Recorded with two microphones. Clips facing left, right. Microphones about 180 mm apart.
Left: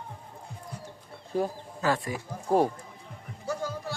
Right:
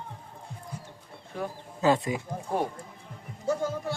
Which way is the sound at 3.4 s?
25° right (ahead or behind).